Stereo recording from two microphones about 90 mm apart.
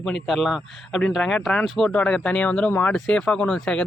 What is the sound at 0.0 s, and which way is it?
A man's voice, 5° left (ahead or behind).